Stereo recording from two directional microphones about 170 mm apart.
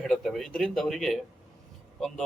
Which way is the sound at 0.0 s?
Centre (ahead or behind).